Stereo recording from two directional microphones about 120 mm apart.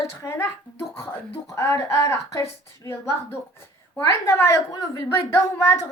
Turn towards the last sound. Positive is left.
turn(degrees=25)  # may be behind; listen again after turning